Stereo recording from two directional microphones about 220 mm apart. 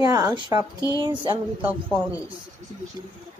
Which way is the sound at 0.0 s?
15° right (ahead or behind).